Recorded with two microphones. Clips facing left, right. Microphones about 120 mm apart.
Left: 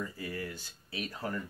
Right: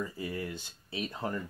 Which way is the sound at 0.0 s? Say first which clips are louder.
Right 2 dB; 25° right (ahead or behind).